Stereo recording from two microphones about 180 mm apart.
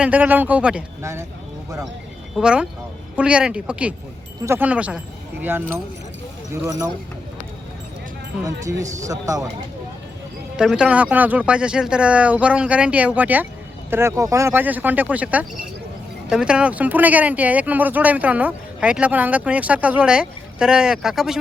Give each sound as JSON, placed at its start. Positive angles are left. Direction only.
{"t": 0.0, "sound": "speech", "side_deg": -10}
{"t": 2.3, "sound": "speech", "side_deg": -5}
{"t": 8.8, "sound": "speech", "side_deg": -40}
{"t": 9.0, "sound": "speech", "side_deg": -20}
{"t": 10.6, "sound": "speech", "side_deg": -5}